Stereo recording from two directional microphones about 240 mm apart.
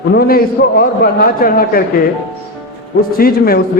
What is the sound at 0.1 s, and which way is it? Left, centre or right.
Speech, left.